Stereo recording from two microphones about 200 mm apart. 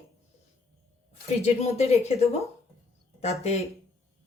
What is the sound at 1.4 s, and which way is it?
Speech, 30° left (ahead or behind).